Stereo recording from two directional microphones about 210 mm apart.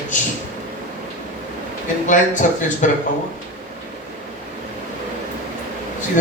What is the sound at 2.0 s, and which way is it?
Speech, 35° left (ahead or behind).